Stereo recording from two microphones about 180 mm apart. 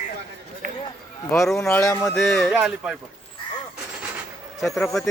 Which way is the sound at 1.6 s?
15° left (ahead or behind).